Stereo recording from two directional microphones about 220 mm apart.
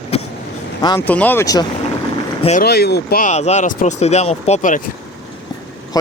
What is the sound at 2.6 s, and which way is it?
Speech, 45° left (ahead or behind).